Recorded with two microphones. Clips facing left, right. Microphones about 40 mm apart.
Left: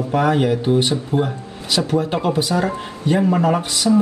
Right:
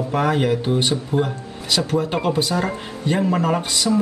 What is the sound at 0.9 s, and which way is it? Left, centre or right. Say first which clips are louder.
Speech: left 1 dB; centre.